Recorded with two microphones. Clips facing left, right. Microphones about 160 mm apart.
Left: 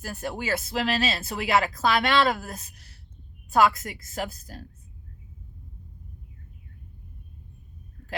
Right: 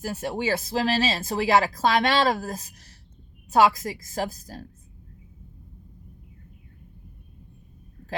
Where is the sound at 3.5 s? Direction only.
30° right (ahead or behind).